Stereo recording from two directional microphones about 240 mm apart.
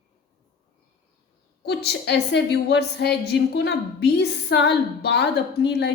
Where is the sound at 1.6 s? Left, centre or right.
Left.